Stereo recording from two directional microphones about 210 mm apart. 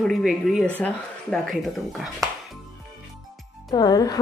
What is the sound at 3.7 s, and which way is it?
Speech, 15° left (ahead or behind).